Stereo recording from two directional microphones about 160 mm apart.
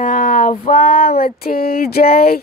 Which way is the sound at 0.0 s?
55° left (ahead or behind).